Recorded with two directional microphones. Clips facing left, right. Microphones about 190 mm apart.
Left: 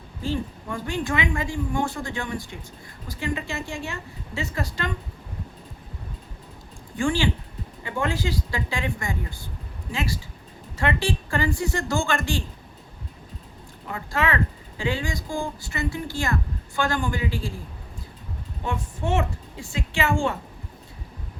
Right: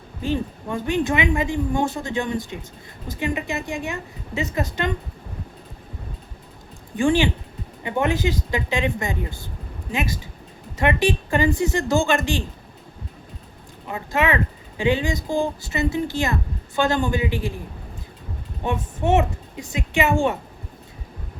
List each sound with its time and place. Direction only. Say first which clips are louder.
0.2 s speech: right 3 dB; 20° right (ahead or behind)
6.9 s speech: right 5 dB; 20° right (ahead or behind)
13.8 s speech: right 4 dB; 20° right (ahead or behind)
18.6 s speech: right 5 dB; 20° right (ahead or behind)